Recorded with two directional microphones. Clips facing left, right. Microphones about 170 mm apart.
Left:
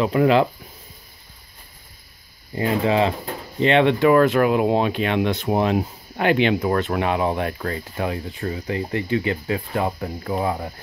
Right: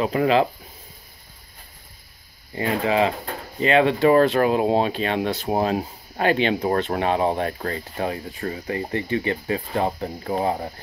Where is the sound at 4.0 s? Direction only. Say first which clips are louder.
Left 1 dB; 30° right (ahead or behind).